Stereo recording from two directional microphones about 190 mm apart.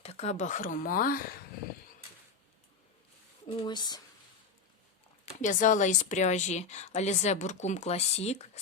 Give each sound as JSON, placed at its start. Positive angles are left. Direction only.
{"t": 0.0, "sound": "speech", "side_deg": 35}
{"t": 3.5, "sound": "speech", "side_deg": 25}
{"t": 5.4, "sound": "a woman's voice", "side_deg": 40}